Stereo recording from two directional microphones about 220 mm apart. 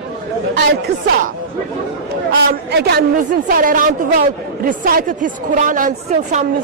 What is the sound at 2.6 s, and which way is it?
A woman's voice, 50° right (ahead or behind).